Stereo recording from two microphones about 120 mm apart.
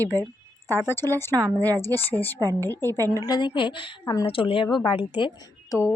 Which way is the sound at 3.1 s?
35° left (ahead or behind).